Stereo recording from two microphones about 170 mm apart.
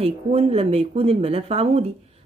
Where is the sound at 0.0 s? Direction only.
35° right (ahead or behind).